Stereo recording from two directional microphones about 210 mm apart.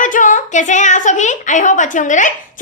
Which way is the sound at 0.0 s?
35° left (ahead or behind).